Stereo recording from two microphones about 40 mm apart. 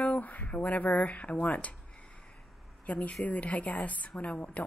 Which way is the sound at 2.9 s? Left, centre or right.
Left.